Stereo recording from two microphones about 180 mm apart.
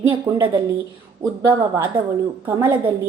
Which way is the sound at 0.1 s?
25° right (ahead or behind).